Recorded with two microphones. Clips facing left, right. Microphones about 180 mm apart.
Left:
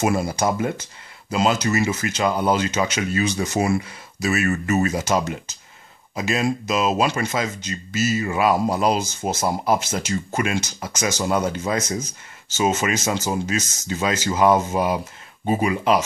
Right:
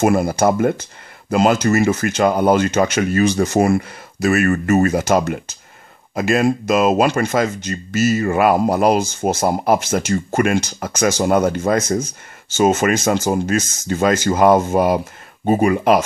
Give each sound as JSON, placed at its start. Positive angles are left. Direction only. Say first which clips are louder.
{"t": 0.0, "sound": "speech", "louder": "right 6 dB", "side_deg": -55}